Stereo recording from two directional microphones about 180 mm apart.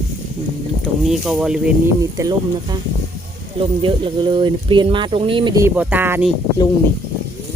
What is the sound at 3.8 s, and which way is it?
Speech, 30° right (ahead or behind).